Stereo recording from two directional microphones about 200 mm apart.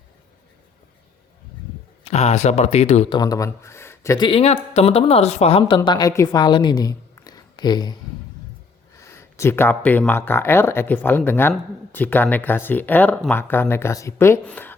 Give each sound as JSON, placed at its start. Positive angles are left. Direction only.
{"t": 2.0, "sound": "speech", "side_deg": 35}
{"t": 3.2, "sound": "speech", "side_deg": 15}
{"t": 4.3, "sound": "speech", "side_deg": 30}
{"t": 9.0, "sound": "speech", "side_deg": 15}